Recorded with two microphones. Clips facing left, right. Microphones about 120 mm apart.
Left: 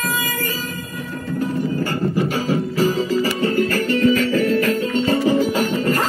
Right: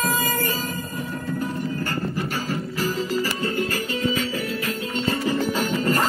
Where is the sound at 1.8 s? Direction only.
15° left (ahead or behind).